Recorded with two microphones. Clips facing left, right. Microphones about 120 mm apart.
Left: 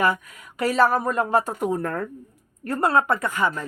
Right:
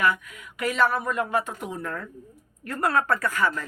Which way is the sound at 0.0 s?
35° left (ahead or behind).